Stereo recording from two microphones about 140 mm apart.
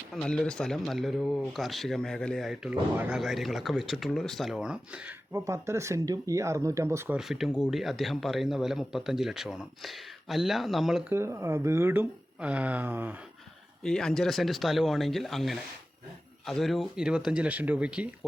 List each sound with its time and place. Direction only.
0.1 s speech: 5° left (ahead or behind); by 5.4 s 10° right (ahead or behind)
5.5 s speech: 20° right (ahead or behind)
7.2 s speech: centre (ahead or behind)
11.1 s speech: 20° right (ahead or behind)
13.8 s speech: 5° left (ahead or behind)